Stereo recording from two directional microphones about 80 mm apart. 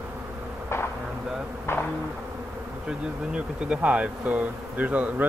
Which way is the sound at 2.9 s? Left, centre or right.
Centre.